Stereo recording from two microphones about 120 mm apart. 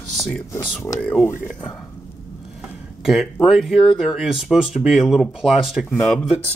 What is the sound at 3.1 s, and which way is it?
Speech, 5° right (ahead or behind).